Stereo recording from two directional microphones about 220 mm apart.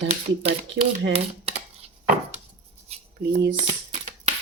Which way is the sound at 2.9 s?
30° right (ahead or behind).